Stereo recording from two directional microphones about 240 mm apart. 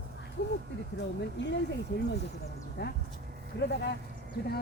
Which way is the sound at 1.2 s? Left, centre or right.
Left.